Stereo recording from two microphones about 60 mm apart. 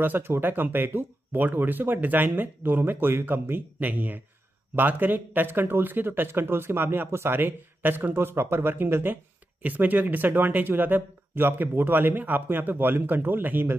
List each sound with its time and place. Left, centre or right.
0.0 s a man's voice: right